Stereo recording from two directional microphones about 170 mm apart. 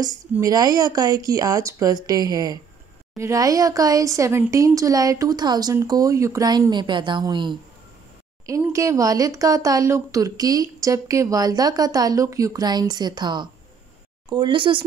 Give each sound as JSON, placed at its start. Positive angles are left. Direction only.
{"t": 0.0, "sound": "speech", "side_deg": -20}